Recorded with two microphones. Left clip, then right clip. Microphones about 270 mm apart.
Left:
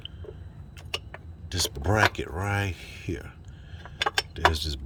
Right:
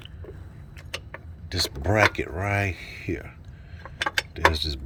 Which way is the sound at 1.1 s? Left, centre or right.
Centre.